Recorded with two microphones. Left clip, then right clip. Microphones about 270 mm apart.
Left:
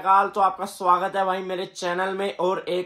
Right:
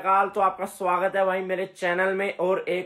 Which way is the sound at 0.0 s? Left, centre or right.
Centre.